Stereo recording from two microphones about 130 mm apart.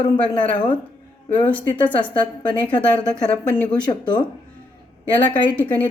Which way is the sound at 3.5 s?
35° left (ahead or behind).